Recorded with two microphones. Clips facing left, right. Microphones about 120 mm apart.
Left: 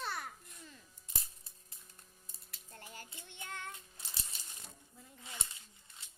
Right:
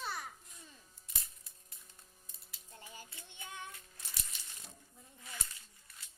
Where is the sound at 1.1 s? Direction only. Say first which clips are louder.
Left 3 dB; 30° left (ahead or behind).